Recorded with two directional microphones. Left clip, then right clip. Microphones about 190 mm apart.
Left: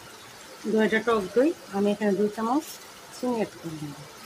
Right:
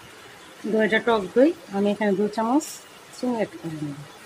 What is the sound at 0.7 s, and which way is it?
Speech, 20° right (ahead or behind).